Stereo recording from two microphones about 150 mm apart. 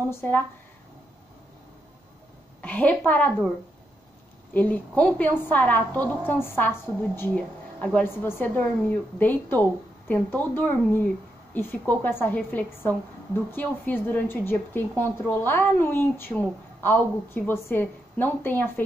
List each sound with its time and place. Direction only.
0.1 s speech: 15° left (ahead or behind)
2.6 s a woman's voice: 10° left (ahead or behind)
4.6 s a woman's voice: 10° left (ahead or behind)